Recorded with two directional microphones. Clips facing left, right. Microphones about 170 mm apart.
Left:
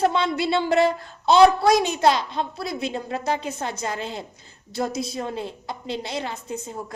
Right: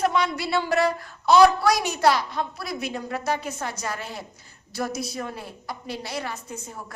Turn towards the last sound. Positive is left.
turn(degrees=25)  # may be behind; listen again after turning